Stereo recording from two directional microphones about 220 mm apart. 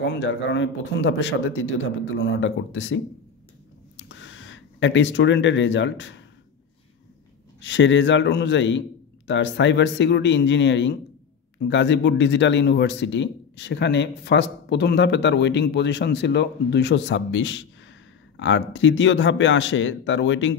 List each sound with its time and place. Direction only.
0.0 s speech: 50° left (ahead or behind)
3.9 s a sound: 60° left (ahead or behind)
7.6 s speech: 55° left (ahead or behind)